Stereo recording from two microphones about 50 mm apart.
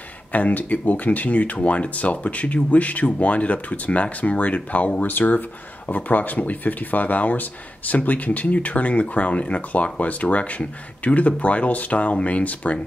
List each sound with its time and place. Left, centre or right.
0.3 s speech: left